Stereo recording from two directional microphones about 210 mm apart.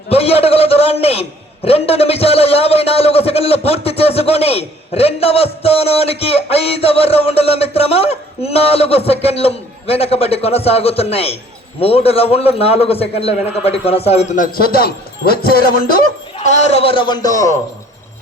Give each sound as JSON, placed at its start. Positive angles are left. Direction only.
{"t": 0.1, "sound": "a man's voice", "side_deg": 30}